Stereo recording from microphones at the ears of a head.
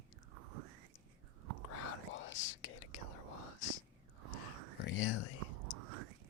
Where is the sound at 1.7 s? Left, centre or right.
Left.